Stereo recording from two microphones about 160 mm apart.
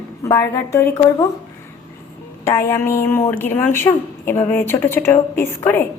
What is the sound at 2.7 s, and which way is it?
Speech, 15° left (ahead or behind).